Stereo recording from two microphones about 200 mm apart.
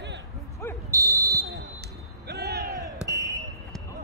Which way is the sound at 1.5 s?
55° right (ahead or behind).